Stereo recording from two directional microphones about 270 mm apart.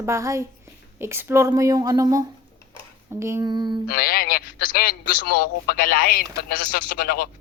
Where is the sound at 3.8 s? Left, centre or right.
Left.